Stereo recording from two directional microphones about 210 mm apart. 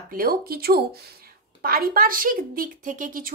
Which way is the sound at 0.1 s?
45° right (ahead or behind).